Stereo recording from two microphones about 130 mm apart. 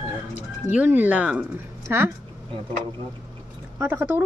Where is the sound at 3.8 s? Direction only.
15° right (ahead or behind).